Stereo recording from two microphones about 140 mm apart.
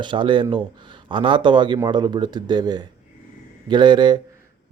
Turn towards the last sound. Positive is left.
turn(degrees=-30)  # may be behind; listen again after turning